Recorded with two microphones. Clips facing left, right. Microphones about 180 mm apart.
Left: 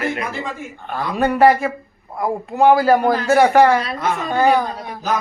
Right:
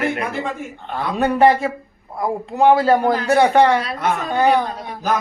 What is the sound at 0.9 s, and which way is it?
Speech, 20° right (ahead or behind).